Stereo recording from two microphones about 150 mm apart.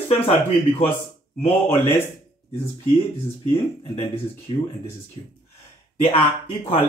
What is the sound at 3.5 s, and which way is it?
Speech, 40° left (ahead or behind).